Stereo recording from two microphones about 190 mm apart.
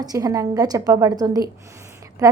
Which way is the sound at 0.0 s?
20° right (ahead or behind).